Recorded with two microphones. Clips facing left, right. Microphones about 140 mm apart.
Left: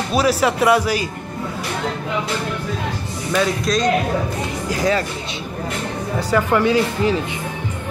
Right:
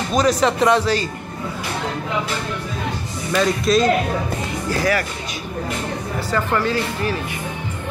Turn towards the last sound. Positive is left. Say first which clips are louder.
# left 5 dB
turn(degrees=15)  # may be behind; listen again after turning